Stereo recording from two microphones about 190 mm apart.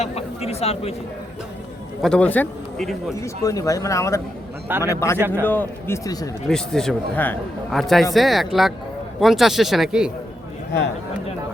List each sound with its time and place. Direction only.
0.0 s a sound: 35° left (ahead or behind)
2.0 s a man's voice: 5° left (ahead or behind)
3.2 s a man's voice: 15° left (ahead or behind)
6.5 s a man's voice: centre (ahead or behind)